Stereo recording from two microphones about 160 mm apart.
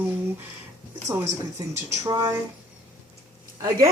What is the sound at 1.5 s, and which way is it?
Speech, 25° right (ahead or behind).